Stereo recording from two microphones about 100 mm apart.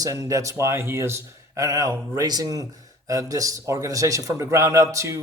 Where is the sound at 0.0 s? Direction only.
35° right (ahead or behind).